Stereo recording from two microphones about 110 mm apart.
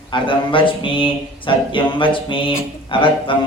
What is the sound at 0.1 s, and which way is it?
Speech, 50° left (ahead or behind).